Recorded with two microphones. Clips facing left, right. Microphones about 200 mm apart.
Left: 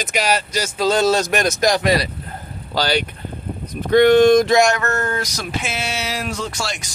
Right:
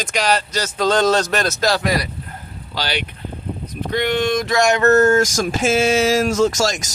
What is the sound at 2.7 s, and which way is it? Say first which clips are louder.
Speech: left 5 dB; 40° left (ahead or behind).